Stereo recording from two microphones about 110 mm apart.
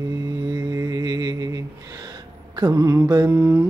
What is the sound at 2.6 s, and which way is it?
Music, 30° right (ahead or behind).